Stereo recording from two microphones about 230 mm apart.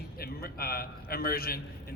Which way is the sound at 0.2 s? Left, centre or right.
Left.